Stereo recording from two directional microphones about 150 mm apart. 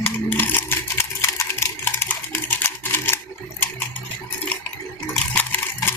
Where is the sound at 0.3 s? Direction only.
15° left (ahead or behind).